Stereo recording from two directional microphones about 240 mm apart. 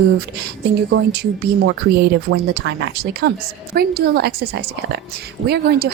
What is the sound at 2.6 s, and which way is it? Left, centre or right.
A woman's voice, right.